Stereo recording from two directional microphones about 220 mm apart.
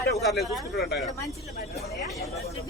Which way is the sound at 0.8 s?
50° left (ahead or behind).